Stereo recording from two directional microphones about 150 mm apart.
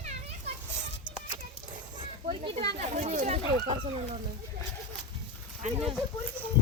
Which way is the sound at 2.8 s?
50° right (ahead or behind).